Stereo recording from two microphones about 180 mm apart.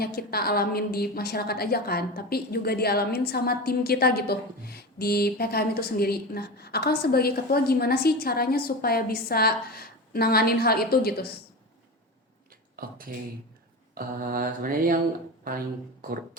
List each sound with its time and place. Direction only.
0.0 s a woman's voice: 60° left (ahead or behind)
12.7 s speech: 55° right (ahead or behind)
13.9 s mantra: 55° right (ahead or behind)